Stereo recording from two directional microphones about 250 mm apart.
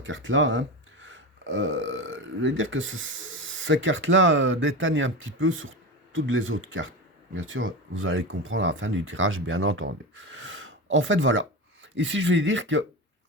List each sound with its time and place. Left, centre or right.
0.0 s speech: right